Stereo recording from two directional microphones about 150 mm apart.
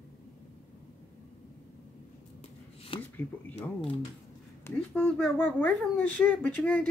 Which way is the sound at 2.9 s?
35° left (ahead or behind).